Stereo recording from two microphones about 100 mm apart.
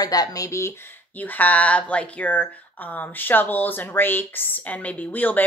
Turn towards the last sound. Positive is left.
turn(degrees=15)  # may be behind; listen again after turning